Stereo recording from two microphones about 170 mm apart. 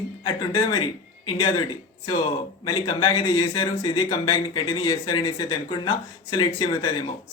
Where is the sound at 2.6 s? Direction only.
25° left (ahead or behind).